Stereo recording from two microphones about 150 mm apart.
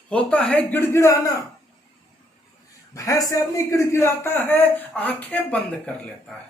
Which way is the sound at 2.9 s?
20° left (ahead or behind).